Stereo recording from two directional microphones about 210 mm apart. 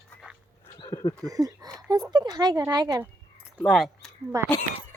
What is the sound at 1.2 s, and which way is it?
Speech, 15° right (ahead or behind).